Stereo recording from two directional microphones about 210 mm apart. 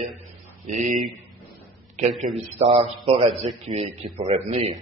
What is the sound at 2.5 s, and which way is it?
A man's voice, 30° right (ahead or behind).